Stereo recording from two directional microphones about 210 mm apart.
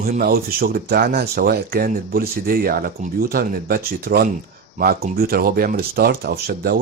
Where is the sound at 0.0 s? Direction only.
45° right (ahead or behind).